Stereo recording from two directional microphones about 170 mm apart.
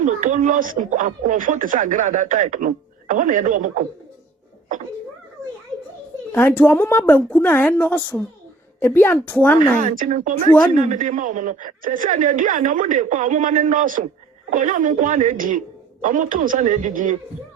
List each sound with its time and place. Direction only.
0.0 s speech: 50° right (ahead or behind)
6.3 s a woman's voice: 10° left (ahead or behind)
9.8 s speech: 50° right (ahead or behind)